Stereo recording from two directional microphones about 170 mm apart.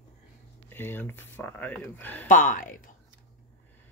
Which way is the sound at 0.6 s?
15° left (ahead or behind).